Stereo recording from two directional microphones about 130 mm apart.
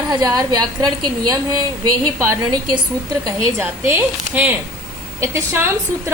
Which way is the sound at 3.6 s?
15° right (ahead or behind).